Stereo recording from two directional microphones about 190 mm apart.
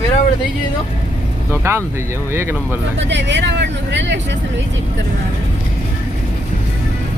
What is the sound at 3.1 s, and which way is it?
Speech, 70° right (ahead or behind).